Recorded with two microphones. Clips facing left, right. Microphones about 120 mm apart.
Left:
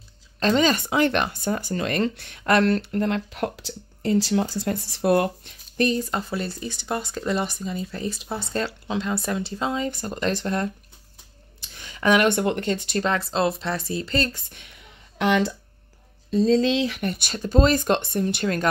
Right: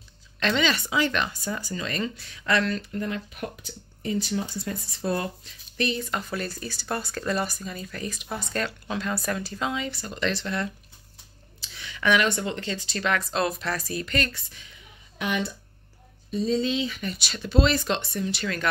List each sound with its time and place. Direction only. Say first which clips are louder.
0.4 s speech: left 5 dB; 40° left (ahead or behind)
6.3 s speech: left 3 dB; 20° left (ahead or behind)
9.8 s speech: left 3 dB; 45° left (ahead or behind)
13.0 s speech: left 1 dB; 30° left (ahead or behind)
14.3 s speech: left 1 dB; 60° left (ahead or behind)
16.3 s speech: left 6 dB; 90° left; by 18.7 s 45° left (ahead or behind)